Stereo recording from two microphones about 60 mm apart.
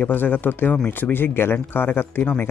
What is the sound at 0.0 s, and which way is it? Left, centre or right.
Speech, left.